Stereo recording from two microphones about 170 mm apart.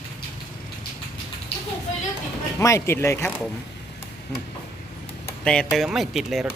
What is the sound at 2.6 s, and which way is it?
Speech, 15° left (ahead or behind).